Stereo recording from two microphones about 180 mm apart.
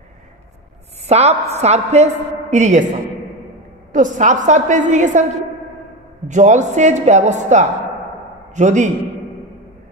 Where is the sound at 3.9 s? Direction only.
45° right (ahead or behind).